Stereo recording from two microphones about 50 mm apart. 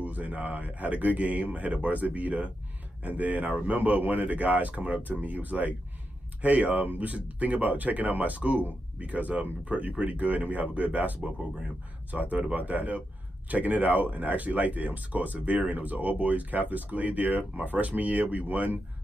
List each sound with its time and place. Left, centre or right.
0.0 s speech: right